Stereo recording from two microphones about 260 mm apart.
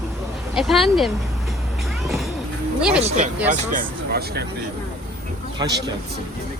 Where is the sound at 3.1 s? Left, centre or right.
Right.